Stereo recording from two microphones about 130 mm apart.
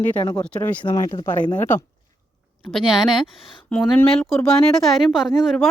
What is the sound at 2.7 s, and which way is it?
Speech, centre (ahead or behind).